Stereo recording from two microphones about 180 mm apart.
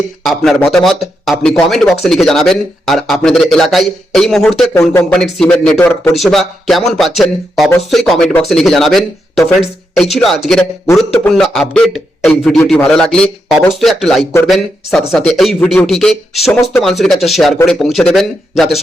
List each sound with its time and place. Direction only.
0.2 s speech: centre (ahead or behind)
4.7 s speech: 15° left (ahead or behind)
5.1 s speech: 5° left (ahead or behind)